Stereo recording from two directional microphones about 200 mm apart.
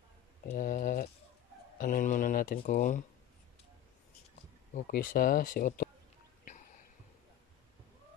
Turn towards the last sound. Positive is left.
turn(degrees=35)  # may be behind; listen again after turning